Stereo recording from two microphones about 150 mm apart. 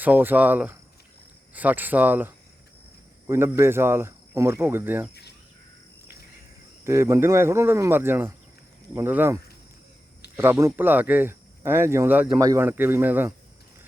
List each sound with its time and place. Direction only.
0.0 s speech: 10° right (ahead or behind)
6.8 s speech: 20° right (ahead or behind)